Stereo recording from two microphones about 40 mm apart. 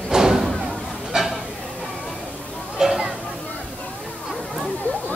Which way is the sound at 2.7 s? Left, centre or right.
Centre.